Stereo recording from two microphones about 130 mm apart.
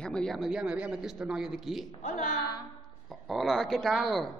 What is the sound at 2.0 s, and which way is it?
Speech, 80° left.